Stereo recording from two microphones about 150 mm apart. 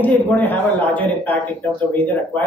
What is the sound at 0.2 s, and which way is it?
Speech, 10° left (ahead or behind).